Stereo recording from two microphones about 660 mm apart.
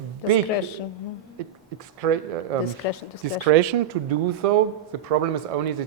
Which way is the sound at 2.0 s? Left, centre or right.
Right.